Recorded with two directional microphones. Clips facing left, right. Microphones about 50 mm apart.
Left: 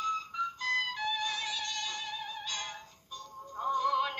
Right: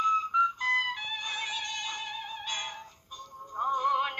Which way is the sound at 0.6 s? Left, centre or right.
Right.